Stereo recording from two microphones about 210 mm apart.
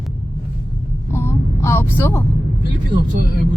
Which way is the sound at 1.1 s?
10° left (ahead or behind).